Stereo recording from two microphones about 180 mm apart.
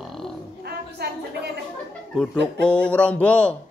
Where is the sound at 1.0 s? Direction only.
65° right (ahead or behind).